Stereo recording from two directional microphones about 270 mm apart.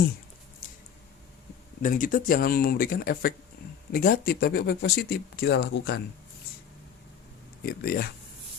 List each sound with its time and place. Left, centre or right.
1.8 s speech: left
7.6 s speech: left